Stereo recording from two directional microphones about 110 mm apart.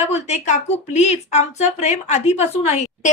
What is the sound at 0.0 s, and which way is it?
A woman's voice, 85° left.